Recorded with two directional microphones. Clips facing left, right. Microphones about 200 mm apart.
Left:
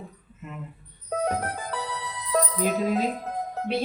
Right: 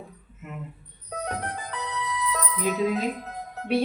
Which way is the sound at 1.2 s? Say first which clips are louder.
Left 4 dB; 50° left (ahead or behind).